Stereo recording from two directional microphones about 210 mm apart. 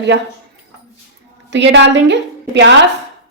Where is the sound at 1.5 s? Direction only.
55° right (ahead or behind).